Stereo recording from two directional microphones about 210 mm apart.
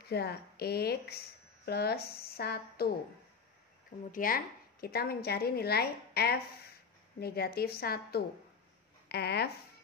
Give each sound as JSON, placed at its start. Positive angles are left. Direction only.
{"t": 0.1, "sound": "a woman's voice", "side_deg": 50}
{"t": 4.1, "sound": "a woman's voice", "side_deg": 40}